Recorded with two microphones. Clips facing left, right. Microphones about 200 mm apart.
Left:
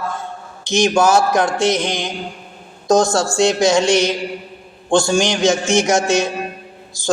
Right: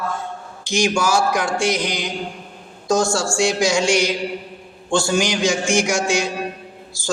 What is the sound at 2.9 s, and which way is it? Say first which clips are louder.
Speech: left 4 dB; 20° left (ahead or behind).